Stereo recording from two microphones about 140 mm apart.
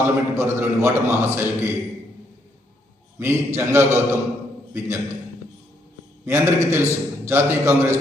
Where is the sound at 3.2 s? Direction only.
20° right (ahead or behind).